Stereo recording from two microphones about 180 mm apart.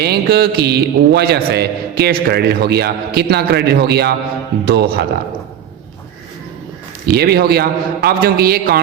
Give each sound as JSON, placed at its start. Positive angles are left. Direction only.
{"t": 0.0, "sound": "a man's voice", "side_deg": -60}
{"t": 7.0, "sound": "a man's voice", "side_deg": -60}